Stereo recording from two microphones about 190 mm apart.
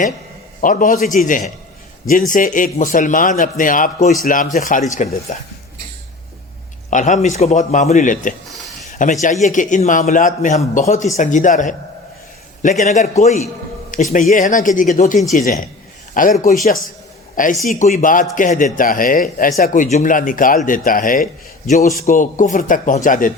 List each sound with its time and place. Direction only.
0.6 s a man's voice: 45° left (ahead or behind)
6.9 s a man's voice: 40° left (ahead or behind)
8.9 s a sound: 40° left (ahead or behind)
9.2 s a man's voice: 40° left (ahead or behind)
17.6 s speech: 45° left (ahead or behind)